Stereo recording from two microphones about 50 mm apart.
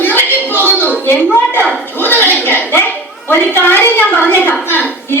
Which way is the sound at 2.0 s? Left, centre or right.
Left.